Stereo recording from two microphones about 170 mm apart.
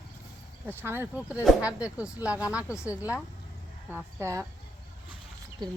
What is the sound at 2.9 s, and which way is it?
Speech, 10° right (ahead or behind).